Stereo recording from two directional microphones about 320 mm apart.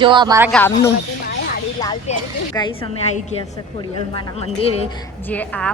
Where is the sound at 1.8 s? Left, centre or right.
Centre.